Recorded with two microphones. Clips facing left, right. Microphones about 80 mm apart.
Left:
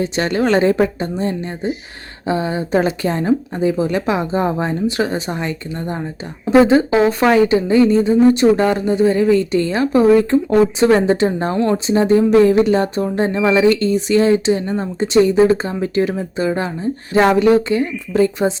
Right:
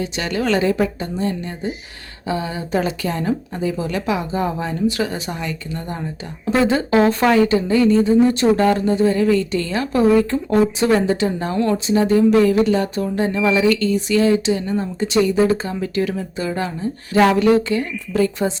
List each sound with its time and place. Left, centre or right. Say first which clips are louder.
0.0 s a woman's voice: left 5 dB; left
6.4 s speech: left 6 dB; centre